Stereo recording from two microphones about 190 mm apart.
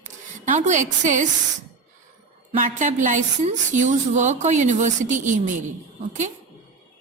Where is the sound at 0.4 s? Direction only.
40° right (ahead or behind).